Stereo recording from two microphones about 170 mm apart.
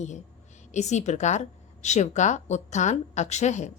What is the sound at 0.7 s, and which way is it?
A woman's voice, 40° left (ahead or behind).